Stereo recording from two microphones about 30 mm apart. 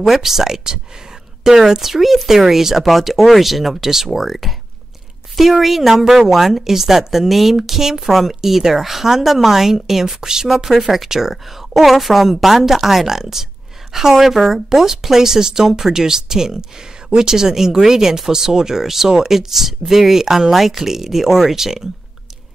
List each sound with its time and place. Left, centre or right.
0.0 s speech: centre
4.2 s speech: centre